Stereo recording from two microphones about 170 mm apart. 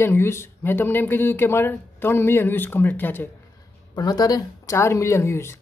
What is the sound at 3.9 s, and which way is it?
Speech, 25° left (ahead or behind).